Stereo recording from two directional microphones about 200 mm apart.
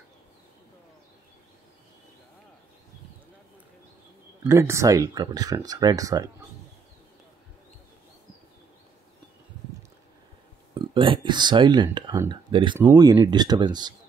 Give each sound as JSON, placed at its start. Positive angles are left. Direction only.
{"t": 4.5, "sound": "speech", "side_deg": -15}
{"t": 10.7, "sound": "speech", "side_deg": -25}